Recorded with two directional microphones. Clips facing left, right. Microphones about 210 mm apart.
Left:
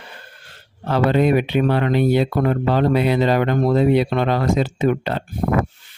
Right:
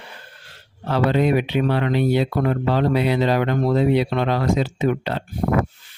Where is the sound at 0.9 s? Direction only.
50° left (ahead or behind).